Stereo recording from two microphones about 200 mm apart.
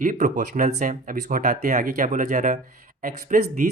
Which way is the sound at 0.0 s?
40° right (ahead or behind).